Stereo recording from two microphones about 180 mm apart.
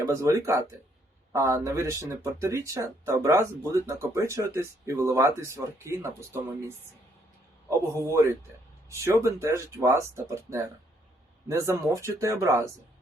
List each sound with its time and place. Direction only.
0.0 s speech: 15° right (ahead or behind)